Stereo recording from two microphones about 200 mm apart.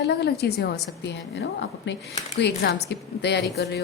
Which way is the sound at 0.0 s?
55° left (ahead or behind).